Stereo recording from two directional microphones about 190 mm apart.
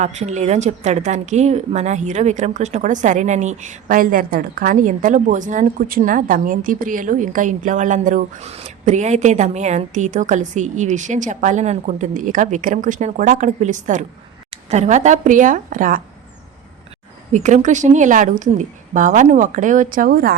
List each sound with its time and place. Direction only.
0.0 s speech: 40° right (ahead or behind)
17.3 s speech: 40° right (ahead or behind)